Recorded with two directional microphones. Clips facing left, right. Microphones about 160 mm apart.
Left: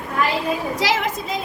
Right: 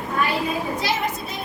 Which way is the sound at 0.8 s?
90° left.